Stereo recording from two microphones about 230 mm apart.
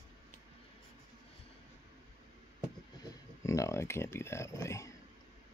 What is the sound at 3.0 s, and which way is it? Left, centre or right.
Speech, centre.